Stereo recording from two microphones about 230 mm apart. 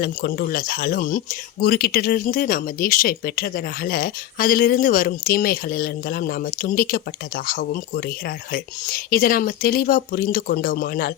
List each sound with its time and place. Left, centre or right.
0.0 s speech: left